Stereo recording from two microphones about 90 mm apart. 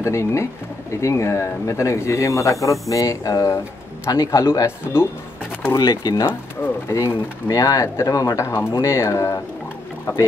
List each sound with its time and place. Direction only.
0.0 s speech: 30° left (ahead or behind)
5.8 s speech: 45° left (ahead or behind)
6.2 s speech: 30° left (ahead or behind)